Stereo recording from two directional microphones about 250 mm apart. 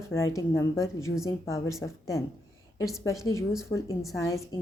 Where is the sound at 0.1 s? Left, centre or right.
Centre.